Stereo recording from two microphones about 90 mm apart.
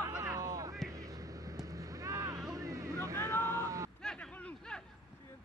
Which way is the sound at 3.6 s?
35° right (ahead or behind).